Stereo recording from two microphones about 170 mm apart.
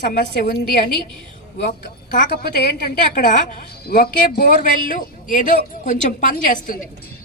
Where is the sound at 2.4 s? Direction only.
65° left (ahead or behind); by 5.4 s 50° left (ahead or behind).